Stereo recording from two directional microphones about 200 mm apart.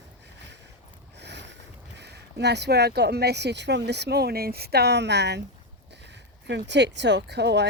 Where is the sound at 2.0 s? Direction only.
55° right (ahead or behind).